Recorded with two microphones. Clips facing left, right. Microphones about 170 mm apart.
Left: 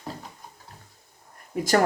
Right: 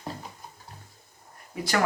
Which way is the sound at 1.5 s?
45° left (ahead or behind).